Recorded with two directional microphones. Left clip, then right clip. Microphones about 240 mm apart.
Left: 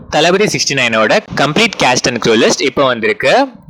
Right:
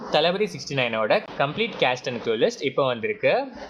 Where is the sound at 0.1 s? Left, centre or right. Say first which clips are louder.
Left 11 dB; left.